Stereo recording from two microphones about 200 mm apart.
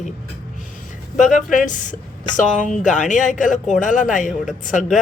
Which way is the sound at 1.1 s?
40° left (ahead or behind).